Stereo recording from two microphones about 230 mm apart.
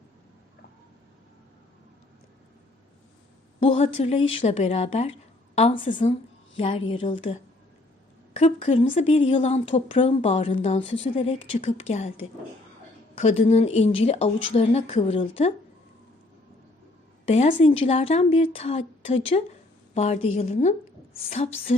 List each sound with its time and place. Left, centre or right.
3.6 s speech: left
13.1 s speech: left
17.2 s speech: left